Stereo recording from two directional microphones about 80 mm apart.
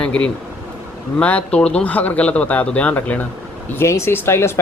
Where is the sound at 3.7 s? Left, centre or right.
Left.